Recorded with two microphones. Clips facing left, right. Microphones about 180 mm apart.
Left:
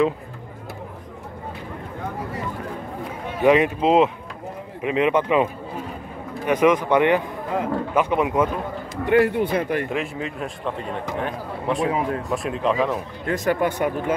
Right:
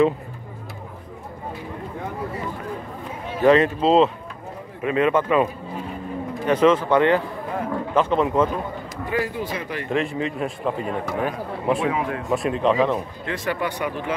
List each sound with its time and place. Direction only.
3.4 s speech: 15° left (ahead or behind)
9.0 s speech: 65° left (ahead or behind)
9.8 s a man's voice: 5° left (ahead or behind)
11.9 s speech: 35° left (ahead or behind)
12.3 s a man's voice: centre (ahead or behind)
13.2 s speech: 45° left (ahead or behind)